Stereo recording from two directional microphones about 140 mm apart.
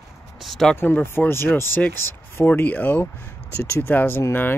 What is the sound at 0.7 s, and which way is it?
Speech, 15° left (ahead or behind).